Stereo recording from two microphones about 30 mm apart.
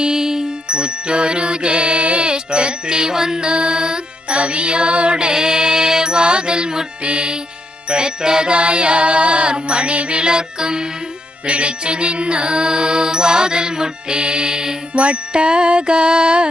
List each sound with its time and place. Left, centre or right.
0.0 s music: right
0.7 s music: right
3.4 s music: right
5.1 s music: right
10.2 s music: right
11.4 s music: right
14.9 s jingle: right
15.3 s music: right